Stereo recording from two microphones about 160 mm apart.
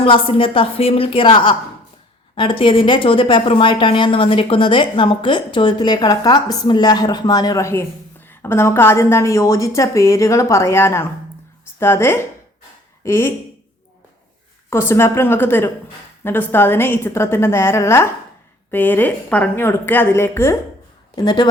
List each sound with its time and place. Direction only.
0.0 s a woman's voice: 35° left (ahead or behind); by 13.3 s 15° left (ahead or behind)
14.7 s a woman's voice: 15° left (ahead or behind)
21.2 s speech: 25° left (ahead or behind)